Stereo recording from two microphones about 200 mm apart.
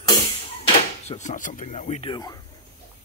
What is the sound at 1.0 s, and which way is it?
Speech, 35° left (ahead or behind).